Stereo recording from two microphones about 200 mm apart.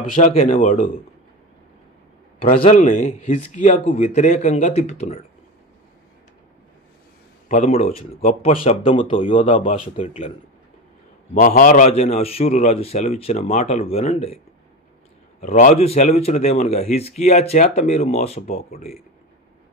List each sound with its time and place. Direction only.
0.1 s a man's voice: 40° left (ahead or behind)
2.6 s a man's voice: 40° left (ahead or behind)
7.4 s a man's voice: 35° left (ahead or behind)
11.3 s a man's voice: 45° left (ahead or behind)
15.4 s a man's voice: 35° left (ahead or behind)